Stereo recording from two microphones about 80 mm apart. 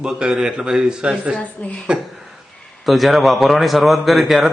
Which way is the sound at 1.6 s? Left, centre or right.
Centre.